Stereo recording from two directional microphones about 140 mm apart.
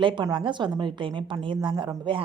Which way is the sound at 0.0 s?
35° right (ahead or behind).